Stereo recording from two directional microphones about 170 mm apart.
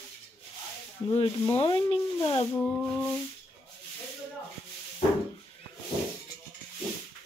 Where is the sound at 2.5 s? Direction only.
5° left (ahead or behind).